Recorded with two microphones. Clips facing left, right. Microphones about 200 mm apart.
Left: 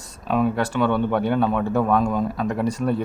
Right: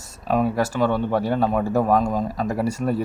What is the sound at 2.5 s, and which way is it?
Speech, 10° right (ahead or behind).